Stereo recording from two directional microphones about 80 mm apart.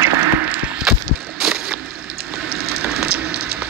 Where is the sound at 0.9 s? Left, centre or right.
Centre.